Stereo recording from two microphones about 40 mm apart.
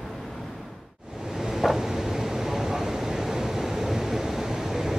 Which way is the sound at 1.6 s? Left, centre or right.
Centre.